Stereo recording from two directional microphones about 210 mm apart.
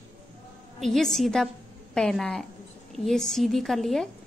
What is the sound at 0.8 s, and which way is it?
A woman's voice, centre (ahead or behind).